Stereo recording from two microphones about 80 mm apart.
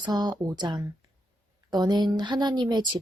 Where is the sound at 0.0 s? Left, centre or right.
Right.